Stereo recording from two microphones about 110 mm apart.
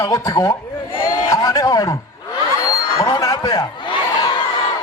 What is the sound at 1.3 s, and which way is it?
Speech, 30° left (ahead or behind).